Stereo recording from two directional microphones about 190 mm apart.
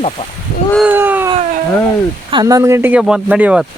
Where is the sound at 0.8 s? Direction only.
10° right (ahead or behind).